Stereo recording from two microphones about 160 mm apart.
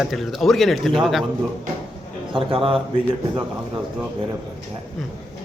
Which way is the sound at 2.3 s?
35° right (ahead or behind).